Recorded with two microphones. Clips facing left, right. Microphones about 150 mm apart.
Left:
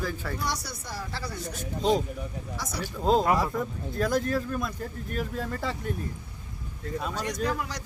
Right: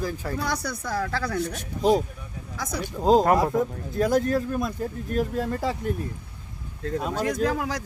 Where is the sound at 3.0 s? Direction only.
40° right (ahead or behind).